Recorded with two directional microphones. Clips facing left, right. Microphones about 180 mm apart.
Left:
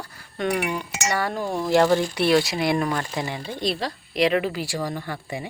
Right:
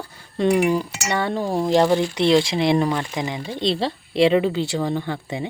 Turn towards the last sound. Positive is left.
turn(degrees=-20)  # may be behind; listen again after turning